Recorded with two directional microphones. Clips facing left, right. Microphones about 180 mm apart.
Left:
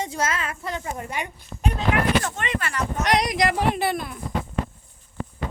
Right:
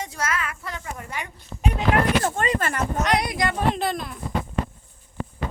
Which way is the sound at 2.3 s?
45° right (ahead or behind).